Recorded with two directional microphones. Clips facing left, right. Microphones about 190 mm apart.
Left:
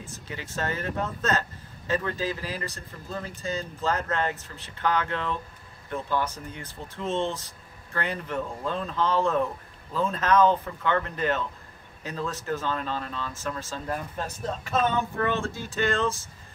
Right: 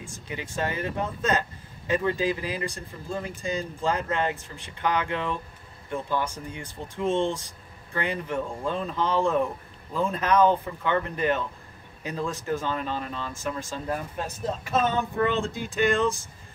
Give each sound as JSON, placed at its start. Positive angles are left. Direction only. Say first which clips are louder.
{"t": 0.0, "sound": "speech", "louder": "right 2 dB", "side_deg": -15}